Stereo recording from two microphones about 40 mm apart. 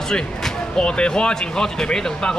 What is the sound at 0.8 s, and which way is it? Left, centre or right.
Speech, left.